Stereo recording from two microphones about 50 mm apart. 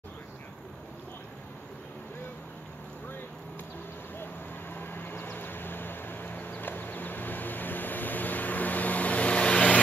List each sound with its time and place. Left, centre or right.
4.7 s vehicle: left